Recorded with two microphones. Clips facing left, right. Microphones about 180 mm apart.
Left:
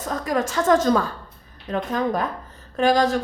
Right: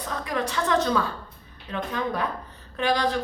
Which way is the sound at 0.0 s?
45° left (ahead or behind).